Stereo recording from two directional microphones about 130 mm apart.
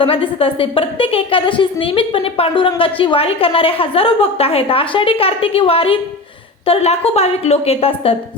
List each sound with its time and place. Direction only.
0.0 s a woman's voice: 45° left (ahead or behind)